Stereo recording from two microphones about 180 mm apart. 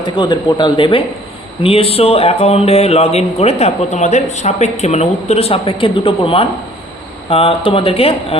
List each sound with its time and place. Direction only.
0.0 s speech: 25° left (ahead or behind)